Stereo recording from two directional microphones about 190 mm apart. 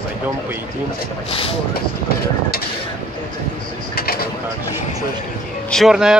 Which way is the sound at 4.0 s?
50° left (ahead or behind).